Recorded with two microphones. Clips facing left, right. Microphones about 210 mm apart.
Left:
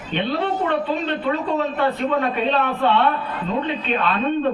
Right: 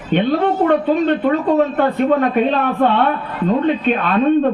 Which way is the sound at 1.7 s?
50° right (ahead or behind).